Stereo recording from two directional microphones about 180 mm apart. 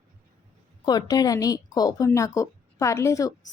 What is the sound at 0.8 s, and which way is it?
A woman's voice, 20° left (ahead or behind).